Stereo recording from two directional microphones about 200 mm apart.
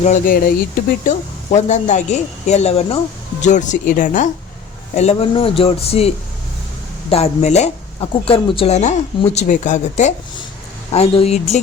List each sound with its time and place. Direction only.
0.0 s speech: 40° left (ahead or behind)
4.9 s speech: 30° left (ahead or behind)